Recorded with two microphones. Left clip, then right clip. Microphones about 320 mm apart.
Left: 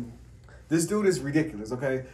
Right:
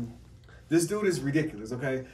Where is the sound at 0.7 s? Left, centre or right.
Centre.